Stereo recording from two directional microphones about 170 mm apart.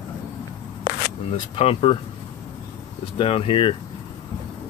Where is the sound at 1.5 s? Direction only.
30° left (ahead or behind).